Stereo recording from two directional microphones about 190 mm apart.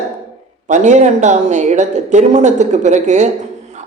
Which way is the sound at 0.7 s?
40° right (ahead or behind).